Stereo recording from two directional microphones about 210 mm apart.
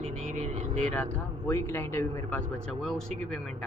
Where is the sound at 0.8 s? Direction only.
5° left (ahead or behind).